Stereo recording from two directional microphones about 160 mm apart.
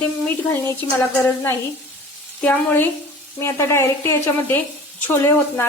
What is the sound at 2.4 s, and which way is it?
Speech, 10° left (ahead or behind).